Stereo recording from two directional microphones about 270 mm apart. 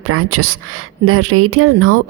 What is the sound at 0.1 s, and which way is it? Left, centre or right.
A woman's voice, right.